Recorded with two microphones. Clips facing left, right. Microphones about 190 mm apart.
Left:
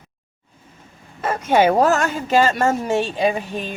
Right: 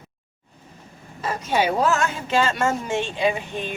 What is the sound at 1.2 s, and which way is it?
Speech, 55° left (ahead or behind).